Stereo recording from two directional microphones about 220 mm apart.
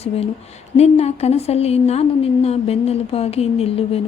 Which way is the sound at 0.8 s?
30° left (ahead or behind).